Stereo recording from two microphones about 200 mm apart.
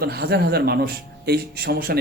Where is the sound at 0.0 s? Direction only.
50° right (ahead or behind).